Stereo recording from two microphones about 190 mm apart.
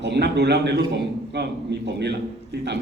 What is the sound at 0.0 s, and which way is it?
A man's voice, 65° right (ahead or behind).